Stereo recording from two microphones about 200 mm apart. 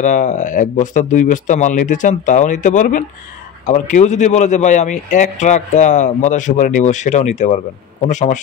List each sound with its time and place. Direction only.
0.0 s speech: 40° left (ahead or behind)